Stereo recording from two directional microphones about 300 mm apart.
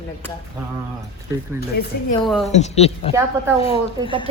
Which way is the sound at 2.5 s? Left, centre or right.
Left.